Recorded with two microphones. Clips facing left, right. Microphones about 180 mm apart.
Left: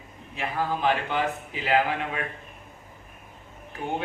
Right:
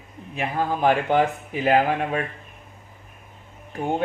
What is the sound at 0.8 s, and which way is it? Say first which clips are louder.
Speech: right 8 dB; 50° right (ahead or behind).